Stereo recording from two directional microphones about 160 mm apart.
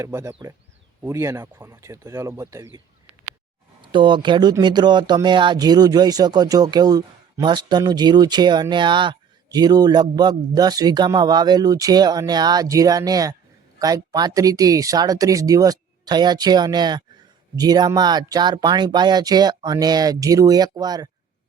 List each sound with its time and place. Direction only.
0.0 s speech: 15° right (ahead or behind)
3.8 s speech: 30° right (ahead or behind)